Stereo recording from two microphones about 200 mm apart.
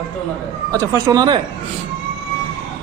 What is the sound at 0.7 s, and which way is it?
Speech, 15° right (ahead or behind).